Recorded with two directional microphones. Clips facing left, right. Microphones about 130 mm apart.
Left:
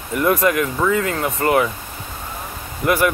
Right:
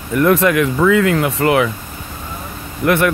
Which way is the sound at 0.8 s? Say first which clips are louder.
Right 7 dB; 80° right.